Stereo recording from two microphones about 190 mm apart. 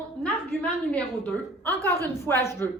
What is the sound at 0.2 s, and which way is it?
A woman's voice, 5° left (ahead or behind).